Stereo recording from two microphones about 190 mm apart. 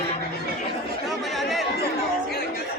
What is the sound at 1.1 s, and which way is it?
Chatter, centre (ahead or behind).